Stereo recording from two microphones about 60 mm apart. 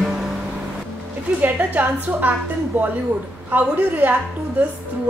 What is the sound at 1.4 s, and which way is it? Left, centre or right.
A woman's voice, right.